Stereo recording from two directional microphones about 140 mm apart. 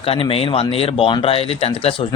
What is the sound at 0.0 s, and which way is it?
A man's voice, 45° left (ahead or behind).